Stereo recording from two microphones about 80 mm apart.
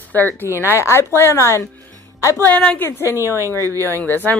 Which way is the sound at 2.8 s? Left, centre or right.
Left.